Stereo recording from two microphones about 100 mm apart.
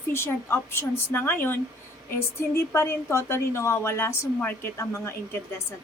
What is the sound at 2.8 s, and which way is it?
Speech, 25° left (ahead or behind).